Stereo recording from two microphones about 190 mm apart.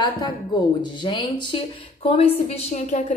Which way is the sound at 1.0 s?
25° left (ahead or behind).